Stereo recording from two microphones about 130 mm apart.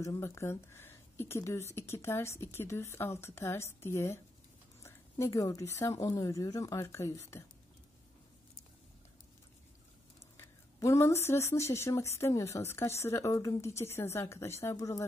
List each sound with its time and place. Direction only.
0.0 s a woman's voice: 25° left (ahead or behind)
10.3 s a woman's voice: 20° left (ahead or behind)